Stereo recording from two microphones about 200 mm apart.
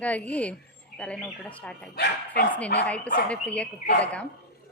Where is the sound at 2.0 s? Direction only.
55° left (ahead or behind).